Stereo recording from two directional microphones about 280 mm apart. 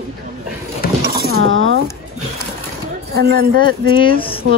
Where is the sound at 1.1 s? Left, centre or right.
Right.